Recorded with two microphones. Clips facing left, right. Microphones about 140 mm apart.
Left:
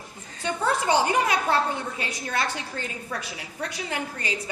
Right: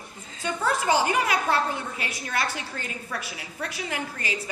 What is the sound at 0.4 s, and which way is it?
A woman's voice, 25° left (ahead or behind).